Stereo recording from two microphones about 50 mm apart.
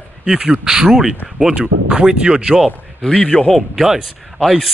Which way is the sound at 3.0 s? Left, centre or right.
Left.